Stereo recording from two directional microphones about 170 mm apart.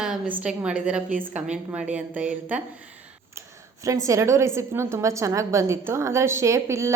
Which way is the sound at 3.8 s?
20° right (ahead or behind).